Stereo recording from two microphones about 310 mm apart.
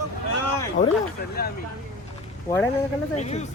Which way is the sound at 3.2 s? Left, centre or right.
Left.